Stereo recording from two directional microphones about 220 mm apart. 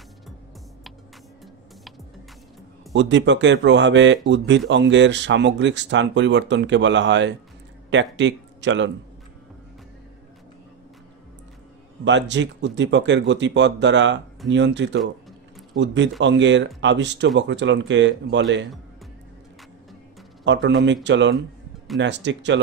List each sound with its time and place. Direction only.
2.9 s speech: 55° right (ahead or behind)
12.0 s speech: 55° right (ahead or behind)
20.4 s speech: 55° right (ahead or behind)